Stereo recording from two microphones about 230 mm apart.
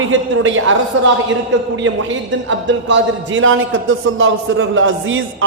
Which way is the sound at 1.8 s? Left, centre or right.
Right.